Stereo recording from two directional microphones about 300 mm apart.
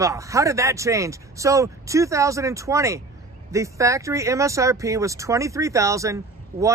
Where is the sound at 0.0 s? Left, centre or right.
Centre.